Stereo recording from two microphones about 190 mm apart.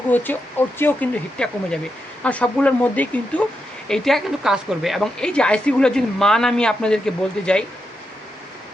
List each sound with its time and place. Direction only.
0.1 s speech: 10° left (ahead or behind)